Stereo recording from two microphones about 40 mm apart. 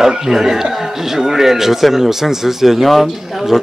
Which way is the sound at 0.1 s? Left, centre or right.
Centre.